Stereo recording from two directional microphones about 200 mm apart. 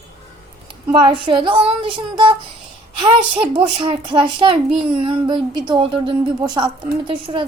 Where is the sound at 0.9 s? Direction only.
25° right (ahead or behind).